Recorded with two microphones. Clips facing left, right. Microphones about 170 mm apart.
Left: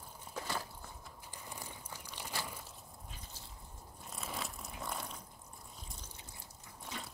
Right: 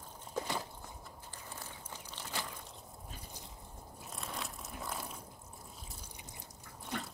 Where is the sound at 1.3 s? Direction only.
15° left (ahead or behind).